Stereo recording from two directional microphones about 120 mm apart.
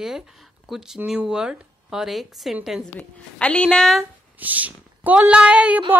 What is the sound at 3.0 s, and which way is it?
Speech, 10° left (ahead or behind).